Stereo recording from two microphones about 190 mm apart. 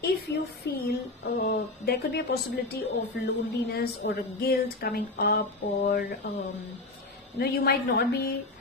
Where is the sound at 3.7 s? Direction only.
55° left (ahead or behind).